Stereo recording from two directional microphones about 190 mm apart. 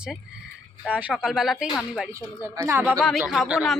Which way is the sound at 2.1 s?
15° right (ahead or behind).